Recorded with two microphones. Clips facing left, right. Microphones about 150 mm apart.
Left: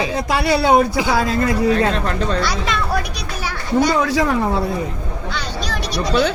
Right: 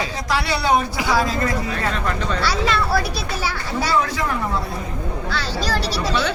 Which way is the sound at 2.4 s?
15° left (ahead or behind).